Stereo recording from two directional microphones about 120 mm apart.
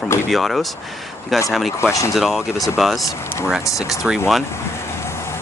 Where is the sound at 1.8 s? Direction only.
25° left (ahead or behind).